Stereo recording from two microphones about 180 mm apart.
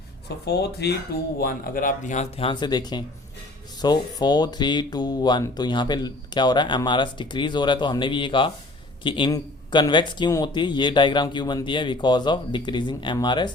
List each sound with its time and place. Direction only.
0.4 s speech: 65° left (ahead or behind)
1.4 s speech: 55° left (ahead or behind); by 13.5 s 25° left (ahead or behind)